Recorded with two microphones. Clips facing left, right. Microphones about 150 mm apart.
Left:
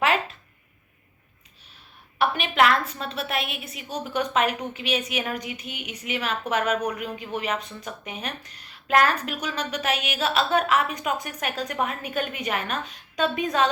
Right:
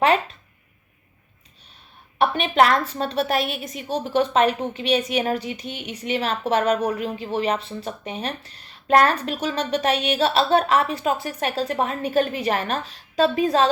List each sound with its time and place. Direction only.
2.1 s a woman's voice: 30° right (ahead or behind)